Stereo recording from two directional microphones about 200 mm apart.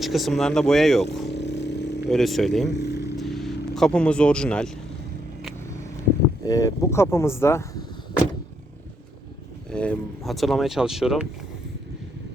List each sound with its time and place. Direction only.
0.0 s speech: centre (ahead or behind)
1.3 s a sound: 60° left (ahead or behind)
2.0 s speech: centre (ahead or behind)
2.7 s vehicle: 55° left (ahead or behind)
3.2 s vehicle: centre (ahead or behind)
6.4 s speech: 20° left (ahead or behind)
9.6 s speech: 5° left (ahead or behind)